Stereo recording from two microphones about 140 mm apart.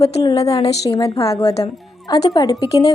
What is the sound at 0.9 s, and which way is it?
Speech, 25° left (ahead or behind).